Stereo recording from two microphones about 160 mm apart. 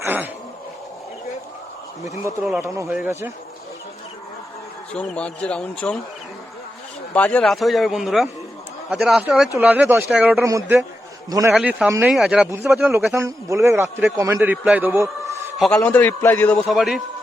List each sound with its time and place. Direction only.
0.0 s a sound: 10° right (ahead or behind)
2.6 s a man's voice: 15° right (ahead or behind)
4.9 s a man's voice: 5° left (ahead or behind)
7.1 s a man's voice: 10° left (ahead or behind); by 10.5 s 10° right (ahead or behind)
11.3 s a man's voice: 20° right (ahead or behind)
11.5 s a man's voice: 5° right (ahead or behind)
15.7 s a man's voice: 10° left (ahead or behind)